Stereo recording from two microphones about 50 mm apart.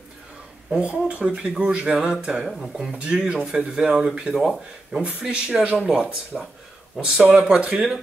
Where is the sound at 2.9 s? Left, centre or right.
Right.